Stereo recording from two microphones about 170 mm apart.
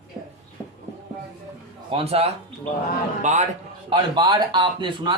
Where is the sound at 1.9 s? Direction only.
35° right (ahead or behind).